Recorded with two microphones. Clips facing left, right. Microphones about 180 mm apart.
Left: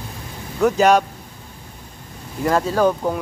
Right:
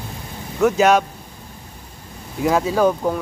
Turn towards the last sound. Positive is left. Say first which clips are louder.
# right 1 dB
turn(degrees=0)  # may be behind; listen again after turning